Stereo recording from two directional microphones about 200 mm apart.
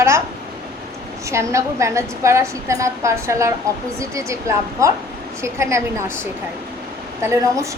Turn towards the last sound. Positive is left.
turn(degrees=-15)  # may be behind; listen again after turning